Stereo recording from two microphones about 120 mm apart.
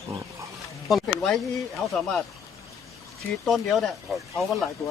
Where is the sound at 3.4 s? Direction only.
Centre (ahead or behind).